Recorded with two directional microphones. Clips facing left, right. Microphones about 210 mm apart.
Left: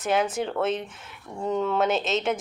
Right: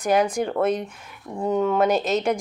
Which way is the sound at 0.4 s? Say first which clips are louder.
Right 4 dB; 10° right (ahead or behind).